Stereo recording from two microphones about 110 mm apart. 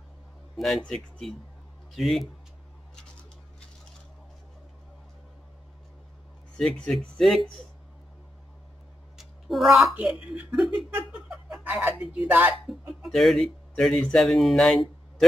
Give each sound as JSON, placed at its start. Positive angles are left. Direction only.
{"t": 0.6, "sound": "speech", "side_deg": 5}
{"t": 6.5, "sound": "speech", "side_deg": 5}
{"t": 9.2, "sound": "a sound", "side_deg": 0}
{"t": 9.9, "sound": "speech", "side_deg": -10}
{"t": 10.9, "sound": "laughter", "side_deg": -20}
{"t": 11.2, "sound": "snicker", "side_deg": -10}
{"t": 11.7, "sound": "speech", "side_deg": -15}
{"t": 12.6, "sound": "speech", "side_deg": 0}